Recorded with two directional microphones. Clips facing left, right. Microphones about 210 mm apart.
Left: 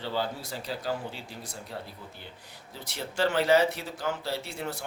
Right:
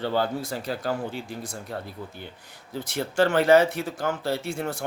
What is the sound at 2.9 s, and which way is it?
Speech, 50° right (ahead or behind).